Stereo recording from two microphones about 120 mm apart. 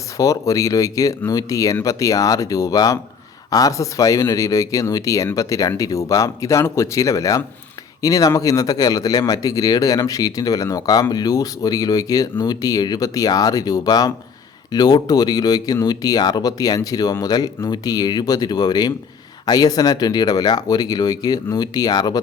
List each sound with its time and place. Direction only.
0.2 s speech: 30° left (ahead or behind)